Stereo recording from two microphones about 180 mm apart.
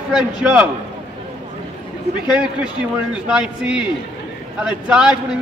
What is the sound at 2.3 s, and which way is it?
A man's voice, 5° right (ahead or behind).